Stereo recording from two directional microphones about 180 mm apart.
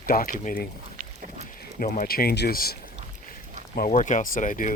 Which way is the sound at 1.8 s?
55° left (ahead or behind).